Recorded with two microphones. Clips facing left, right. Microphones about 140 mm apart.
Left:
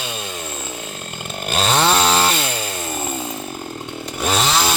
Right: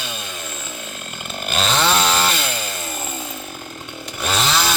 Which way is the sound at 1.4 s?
40° left (ahead or behind).